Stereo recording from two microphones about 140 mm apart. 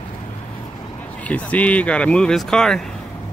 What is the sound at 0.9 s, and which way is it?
Speech, 10° left (ahead or behind).